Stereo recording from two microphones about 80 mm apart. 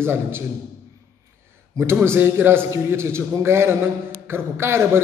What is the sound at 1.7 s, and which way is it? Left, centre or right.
A man's voice, right.